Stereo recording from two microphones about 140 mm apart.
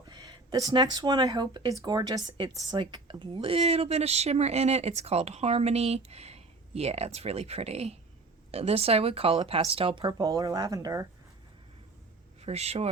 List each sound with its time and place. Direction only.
0.1 s speech: 30° right (ahead or behind)
12.4 s speech: 50° right (ahead or behind)